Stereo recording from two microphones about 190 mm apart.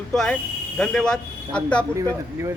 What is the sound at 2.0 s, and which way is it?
Speech, 15° right (ahead or behind).